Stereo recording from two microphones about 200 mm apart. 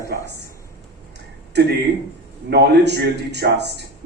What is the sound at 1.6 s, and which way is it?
A man's voice, 55° right (ahead or behind).